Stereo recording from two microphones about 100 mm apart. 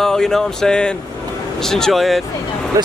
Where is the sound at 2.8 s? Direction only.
35° right (ahead or behind).